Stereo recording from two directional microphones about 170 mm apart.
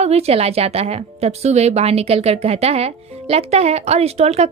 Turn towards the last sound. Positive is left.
turn(degrees=-40)  # may be behind; listen again after turning